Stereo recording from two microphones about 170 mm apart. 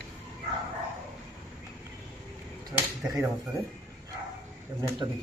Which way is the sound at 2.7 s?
15° right (ahead or behind).